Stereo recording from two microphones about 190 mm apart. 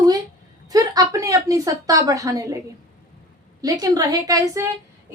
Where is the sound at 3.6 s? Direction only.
20° right (ahead or behind).